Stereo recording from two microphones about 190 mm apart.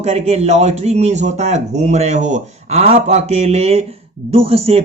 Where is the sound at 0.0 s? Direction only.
35° right (ahead or behind).